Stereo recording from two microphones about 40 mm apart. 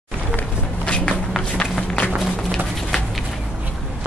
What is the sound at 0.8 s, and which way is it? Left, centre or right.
Walk, left.